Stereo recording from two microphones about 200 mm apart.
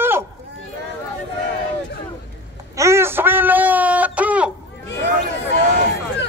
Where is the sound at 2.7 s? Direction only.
15° right (ahead or behind).